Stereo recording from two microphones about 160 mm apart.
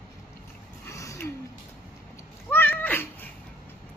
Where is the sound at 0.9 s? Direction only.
20° left (ahead or behind).